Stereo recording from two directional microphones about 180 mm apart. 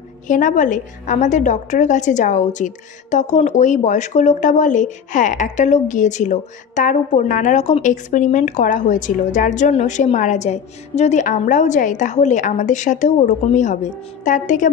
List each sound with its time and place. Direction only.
0.3 s a woman's voice: 45° left (ahead or behind)